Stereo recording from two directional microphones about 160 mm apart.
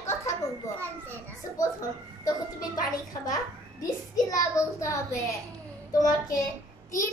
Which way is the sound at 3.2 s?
20° left (ahead or behind).